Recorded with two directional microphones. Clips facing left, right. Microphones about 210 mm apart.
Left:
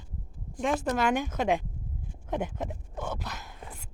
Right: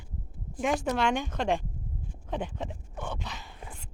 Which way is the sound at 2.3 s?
10° left (ahead or behind).